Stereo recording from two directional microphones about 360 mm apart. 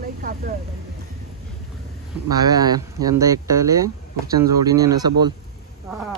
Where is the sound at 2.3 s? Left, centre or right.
Centre.